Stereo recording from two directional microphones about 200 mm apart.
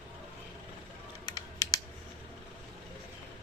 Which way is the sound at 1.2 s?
20° left (ahead or behind).